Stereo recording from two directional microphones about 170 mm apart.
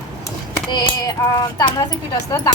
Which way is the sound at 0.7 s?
25° left (ahead or behind).